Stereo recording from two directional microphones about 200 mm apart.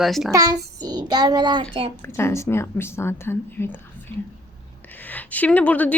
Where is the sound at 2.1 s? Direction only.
15° left (ahead or behind).